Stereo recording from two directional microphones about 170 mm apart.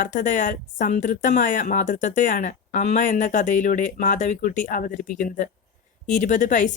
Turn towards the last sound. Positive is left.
turn(degrees=45)  # may be behind; listen again after turning